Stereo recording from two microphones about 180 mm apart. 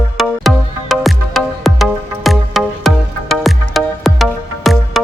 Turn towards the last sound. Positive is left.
turn(degrees=0)  # may be behind; listen again after turning